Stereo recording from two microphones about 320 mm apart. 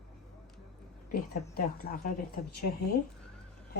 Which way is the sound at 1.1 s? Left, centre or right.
Left.